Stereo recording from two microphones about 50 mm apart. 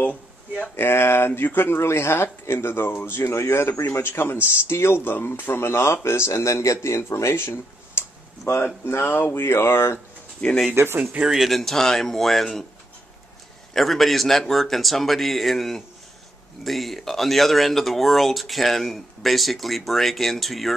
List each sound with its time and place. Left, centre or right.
0.0 s speech: left
0.7 s speech: left
1.9 s speech: left
8.5 s speech: left
8.8 s speech: left
10.4 s speech: left
10.8 s speech: right
11.2 s speech: centre
13.7 s speech: centre